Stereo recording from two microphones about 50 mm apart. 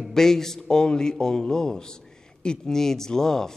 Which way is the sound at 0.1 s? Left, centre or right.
Centre.